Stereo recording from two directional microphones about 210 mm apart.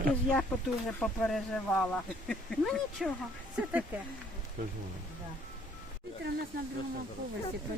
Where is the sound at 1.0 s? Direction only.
Centre (ahead or behind).